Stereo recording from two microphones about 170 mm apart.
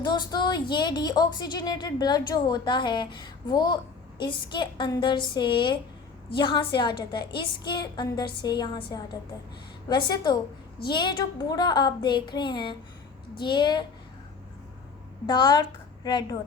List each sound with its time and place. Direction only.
0.0 s speech: 25° left (ahead or behind)
15.3 s speech: 25° left (ahead or behind)